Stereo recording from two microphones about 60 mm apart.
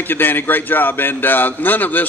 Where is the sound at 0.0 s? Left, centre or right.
Left.